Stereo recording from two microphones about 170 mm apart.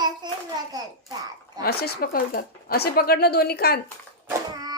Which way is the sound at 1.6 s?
65° left (ahead or behind).